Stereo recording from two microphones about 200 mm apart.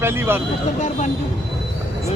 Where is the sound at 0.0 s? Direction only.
10° right (ahead or behind).